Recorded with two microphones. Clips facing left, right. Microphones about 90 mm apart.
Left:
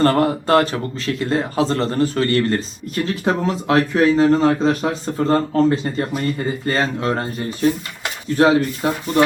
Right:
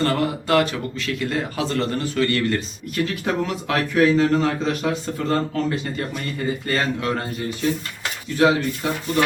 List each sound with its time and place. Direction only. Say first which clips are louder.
0.0 s speech: left 6 dB; 40° left (ahead or behind)